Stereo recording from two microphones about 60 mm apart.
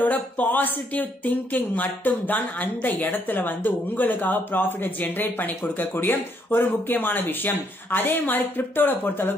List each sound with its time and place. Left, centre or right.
0.0 s speech: left